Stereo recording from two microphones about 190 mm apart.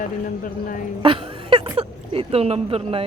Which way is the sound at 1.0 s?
25° right (ahead or behind).